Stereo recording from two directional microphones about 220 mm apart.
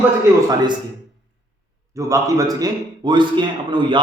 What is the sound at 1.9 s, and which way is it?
A man's voice, 15° right (ahead or behind).